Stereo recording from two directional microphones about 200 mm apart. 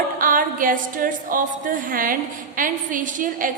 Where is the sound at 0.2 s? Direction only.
45° right (ahead or behind).